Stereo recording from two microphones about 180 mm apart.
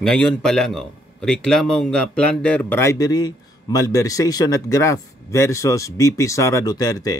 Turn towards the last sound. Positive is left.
turn(degrees=20)  # may be behind; listen again after turning